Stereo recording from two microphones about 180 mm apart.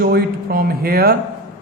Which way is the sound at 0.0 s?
60° right (ahead or behind).